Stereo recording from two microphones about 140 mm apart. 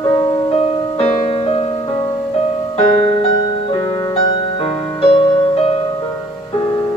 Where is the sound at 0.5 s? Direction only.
40° left (ahead or behind).